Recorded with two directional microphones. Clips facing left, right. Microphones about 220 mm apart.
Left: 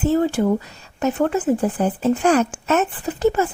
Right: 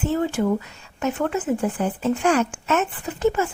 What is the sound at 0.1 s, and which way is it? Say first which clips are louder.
Speech: left 3 dB; 35° left (ahead or behind).